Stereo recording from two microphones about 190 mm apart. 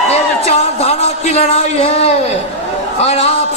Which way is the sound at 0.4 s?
35° left (ahead or behind).